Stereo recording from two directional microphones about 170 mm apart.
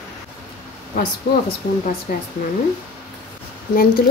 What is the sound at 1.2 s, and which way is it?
Speech, 80° left.